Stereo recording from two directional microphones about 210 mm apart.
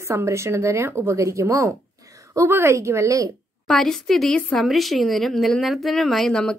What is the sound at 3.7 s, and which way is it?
Speech, 5° left (ahead or behind).